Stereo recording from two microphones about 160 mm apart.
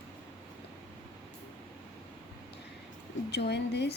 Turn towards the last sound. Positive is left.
turn(degrees=90)